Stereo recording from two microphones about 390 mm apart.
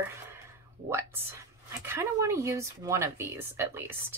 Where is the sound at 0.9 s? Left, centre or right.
Centre.